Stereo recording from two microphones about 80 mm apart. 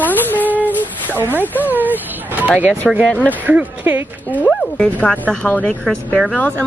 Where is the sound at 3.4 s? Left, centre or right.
Right.